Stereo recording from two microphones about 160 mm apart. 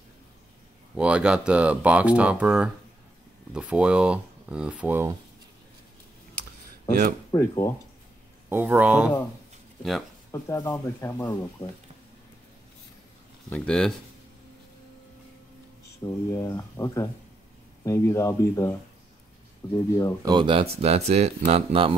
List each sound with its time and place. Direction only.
0.9 s speech: 5° right (ahead or behind)
7.2 s speech: 20° left (ahead or behind)
8.5 s speech: 10° right (ahead or behind)
10.3 s speech: 20° left (ahead or behind)
13.5 s speech: 5° left (ahead or behind)
16.0 s speech: 20° left (ahead or behind)
20.2 s speech: 30° right (ahead or behind)